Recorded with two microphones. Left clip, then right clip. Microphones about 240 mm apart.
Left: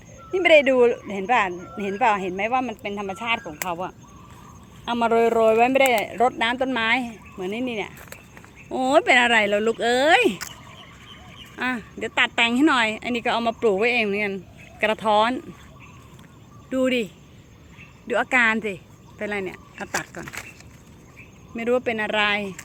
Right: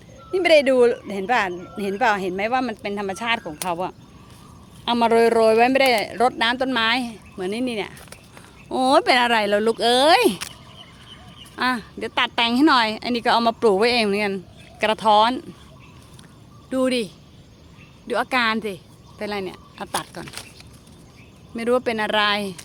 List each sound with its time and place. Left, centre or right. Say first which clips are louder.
0.3 s a woman's voice: even; centre
11.5 s a woman's voice: right 4 dB; centre
16.6 s a woman's voice: right 1 dB; centre
18.1 s a woman's voice: left 1 dB; centre
21.5 s a woman's voice: right 2 dB; centre